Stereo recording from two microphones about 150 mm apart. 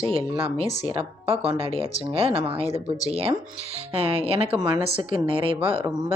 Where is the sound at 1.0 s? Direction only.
40° right (ahead or behind).